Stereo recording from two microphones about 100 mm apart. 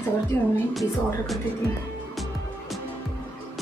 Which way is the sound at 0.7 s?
Centre (ahead or behind).